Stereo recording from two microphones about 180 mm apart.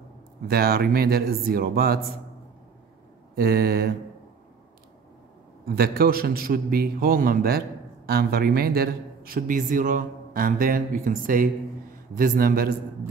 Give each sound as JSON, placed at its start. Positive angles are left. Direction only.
{"t": 0.5, "sound": "a man's voice", "side_deg": -60}
{"t": 3.3, "sound": "a man's voice", "side_deg": -60}
{"t": 5.7, "sound": "a man's voice", "side_deg": -55}